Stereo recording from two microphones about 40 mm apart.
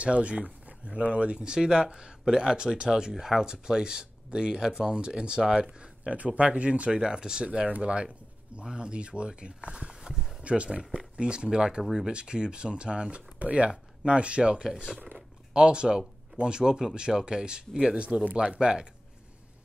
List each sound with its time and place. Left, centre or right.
0.0 s speech: right
6.1 s speech: right
7.0 s speech: centre
7.6 s speech: right
8.6 s speech: right
10.4 s speech: right
13.4 s speech: right
15.1 s a sound: right
16.3 s speech: right